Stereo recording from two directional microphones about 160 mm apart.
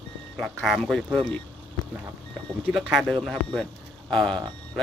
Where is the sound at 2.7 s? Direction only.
Centre (ahead or behind).